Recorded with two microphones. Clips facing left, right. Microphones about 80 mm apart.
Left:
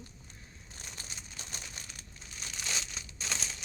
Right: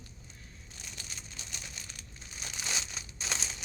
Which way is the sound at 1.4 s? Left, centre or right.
Left.